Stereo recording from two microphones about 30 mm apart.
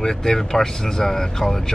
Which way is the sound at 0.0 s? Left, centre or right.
Centre.